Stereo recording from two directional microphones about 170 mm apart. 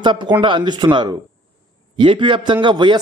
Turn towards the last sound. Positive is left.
turn(degrees=-25)  # may be behind; listen again after turning